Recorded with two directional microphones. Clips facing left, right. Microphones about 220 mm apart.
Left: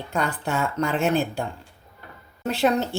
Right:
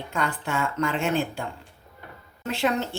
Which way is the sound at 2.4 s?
40° left (ahead or behind).